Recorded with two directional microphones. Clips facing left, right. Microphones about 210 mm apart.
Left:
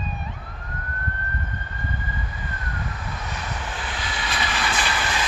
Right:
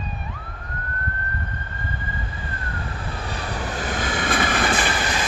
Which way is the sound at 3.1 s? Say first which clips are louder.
Right 3 dB; 30° right (ahead or behind).